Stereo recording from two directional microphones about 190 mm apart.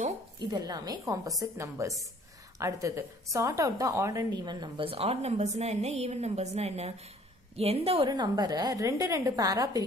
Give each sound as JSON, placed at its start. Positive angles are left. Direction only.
{"t": 0.4, "sound": "a woman's voice", "side_deg": -20}